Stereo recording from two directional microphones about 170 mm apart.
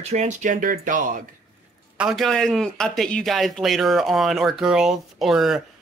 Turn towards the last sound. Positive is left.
turn(degrees=0)  # may be behind; listen again after turning